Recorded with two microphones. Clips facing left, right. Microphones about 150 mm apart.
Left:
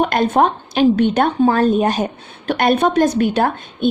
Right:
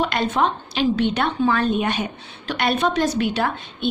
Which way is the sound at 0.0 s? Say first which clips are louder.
Left 6 dB; 50° left (ahead or behind).